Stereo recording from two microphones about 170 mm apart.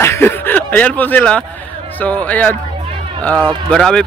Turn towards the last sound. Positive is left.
turn(degrees=5)  # may be behind; listen again after turning